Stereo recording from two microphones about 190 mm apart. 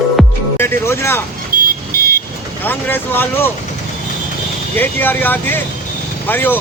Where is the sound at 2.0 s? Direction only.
50° right (ahead or behind).